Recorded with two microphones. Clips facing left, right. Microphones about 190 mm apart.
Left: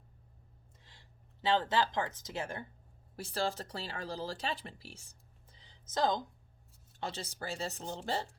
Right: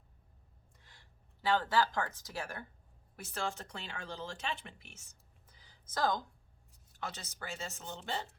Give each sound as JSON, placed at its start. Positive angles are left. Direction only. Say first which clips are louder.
{"t": 0.9, "sound": "speech", "louder": "left 2 dB", "side_deg": 25}
{"t": 7.0, "sound": "speech", "louder": "left 4 dB", "side_deg": 30}